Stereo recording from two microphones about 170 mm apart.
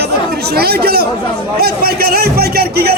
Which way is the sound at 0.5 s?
70° right (ahead or behind).